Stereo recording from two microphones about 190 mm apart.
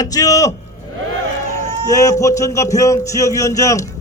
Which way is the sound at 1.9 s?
15° left (ahead or behind).